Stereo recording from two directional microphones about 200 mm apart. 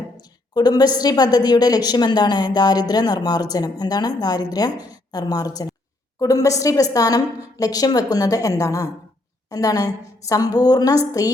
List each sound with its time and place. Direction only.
0.2 s a woman's voice: 20° left (ahead or behind)